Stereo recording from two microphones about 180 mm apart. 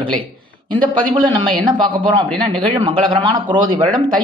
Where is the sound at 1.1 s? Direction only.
25° right (ahead or behind).